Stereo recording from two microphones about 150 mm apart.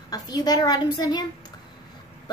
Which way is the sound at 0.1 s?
25° left (ahead or behind).